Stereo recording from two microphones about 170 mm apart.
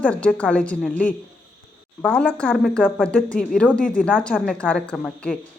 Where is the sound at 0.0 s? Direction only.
5° left (ahead or behind).